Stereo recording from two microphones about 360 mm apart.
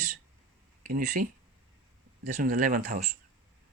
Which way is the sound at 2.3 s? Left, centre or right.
Right.